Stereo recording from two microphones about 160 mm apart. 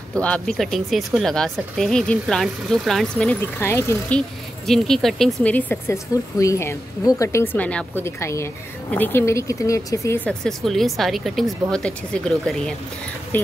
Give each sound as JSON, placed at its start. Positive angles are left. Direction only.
{"t": 0.1, "sound": "speech", "side_deg": 5}
{"t": 3.5, "sound": "speech", "side_deg": 15}
{"t": 4.6, "sound": "speech", "side_deg": 0}